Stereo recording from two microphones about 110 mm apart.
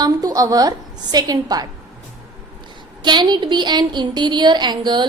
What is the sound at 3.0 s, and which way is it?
A woman's voice, 45° right (ahead or behind).